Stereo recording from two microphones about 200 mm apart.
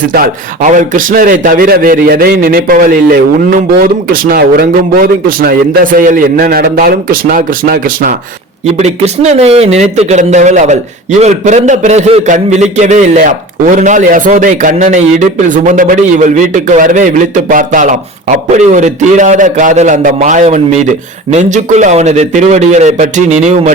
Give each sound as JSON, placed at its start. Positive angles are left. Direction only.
{"t": 0.8, "sound": "a man's voice", "side_deg": -45}
{"t": 8.8, "sound": "a man's voice", "side_deg": -35}